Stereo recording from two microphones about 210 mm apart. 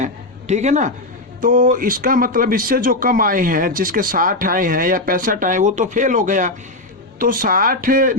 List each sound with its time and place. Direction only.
0.0 s a woman's voice: 35° right (ahead or behind)